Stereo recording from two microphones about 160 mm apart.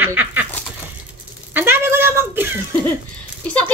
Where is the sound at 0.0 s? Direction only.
10° right (ahead or behind).